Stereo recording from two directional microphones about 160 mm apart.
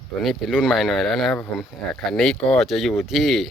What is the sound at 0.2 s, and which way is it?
Speech, centre (ahead or behind).